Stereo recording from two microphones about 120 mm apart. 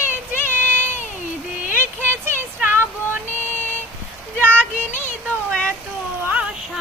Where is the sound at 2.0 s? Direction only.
20° right (ahead or behind).